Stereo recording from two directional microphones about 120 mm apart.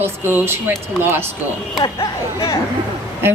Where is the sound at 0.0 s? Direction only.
20° right (ahead or behind).